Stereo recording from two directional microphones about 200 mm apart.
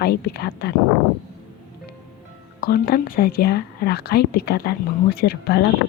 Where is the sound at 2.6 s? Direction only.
50° left (ahead or behind).